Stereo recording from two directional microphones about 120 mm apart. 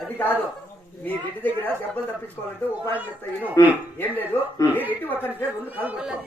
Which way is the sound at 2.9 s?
15° right (ahead or behind).